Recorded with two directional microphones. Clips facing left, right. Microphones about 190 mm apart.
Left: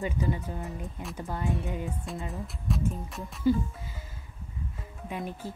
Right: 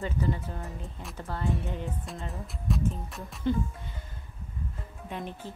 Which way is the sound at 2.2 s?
Centre (ahead or behind).